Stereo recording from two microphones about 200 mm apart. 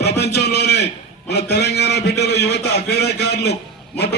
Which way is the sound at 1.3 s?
55° left (ahead or behind).